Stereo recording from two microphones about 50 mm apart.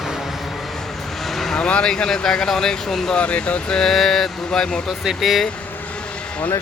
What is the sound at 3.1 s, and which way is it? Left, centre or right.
Speech, left.